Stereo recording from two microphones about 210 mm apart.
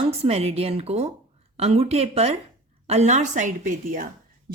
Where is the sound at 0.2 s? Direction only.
30° right (ahead or behind).